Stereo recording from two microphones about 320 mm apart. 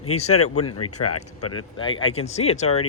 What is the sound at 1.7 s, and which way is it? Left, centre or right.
Speech, centre.